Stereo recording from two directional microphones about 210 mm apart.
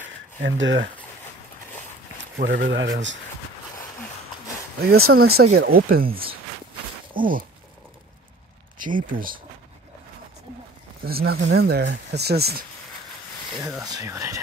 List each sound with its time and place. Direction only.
0.4 s speech: 60° right (ahead or behind)
2.1 s speech: 55° right (ahead or behind)
5.1 s speech: 50° right (ahead or behind)
7.2 s a sound: 40° right (ahead or behind)
8.7 s speech: 40° right (ahead or behind)
11.1 s speech: 45° right (ahead or behind)
13.9 s speech: 15° right (ahead or behind)